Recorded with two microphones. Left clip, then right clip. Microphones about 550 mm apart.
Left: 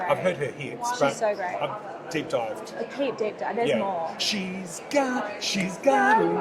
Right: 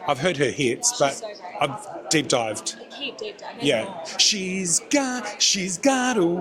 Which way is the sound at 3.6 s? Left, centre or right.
Right.